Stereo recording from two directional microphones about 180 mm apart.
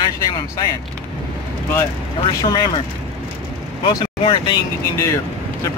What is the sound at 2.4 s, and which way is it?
Speech, 25° left (ahead or behind).